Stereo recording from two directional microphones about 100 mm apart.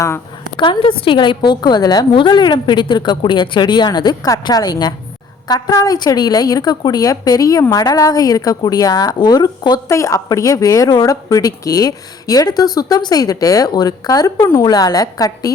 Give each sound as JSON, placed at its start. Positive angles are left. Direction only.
{"t": 0.5, "sound": "a woman's voice", "side_deg": 55}
{"t": 9.9, "sound": "a woman's voice", "side_deg": 30}